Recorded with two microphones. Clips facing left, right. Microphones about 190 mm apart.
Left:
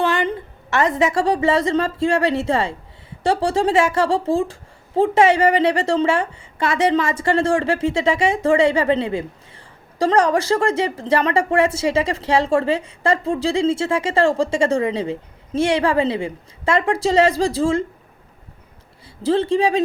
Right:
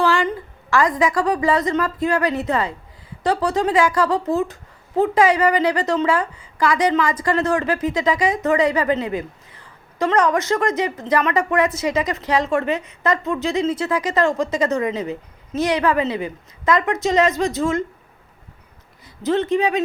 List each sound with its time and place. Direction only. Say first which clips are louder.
0.0 s a woman's voice: right 1 dB; 20° left (ahead or behind)
19.0 s speech: left 2 dB; 30° left (ahead or behind)